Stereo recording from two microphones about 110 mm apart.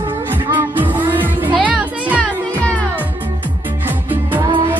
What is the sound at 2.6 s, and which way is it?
Music, 10° left (ahead or behind).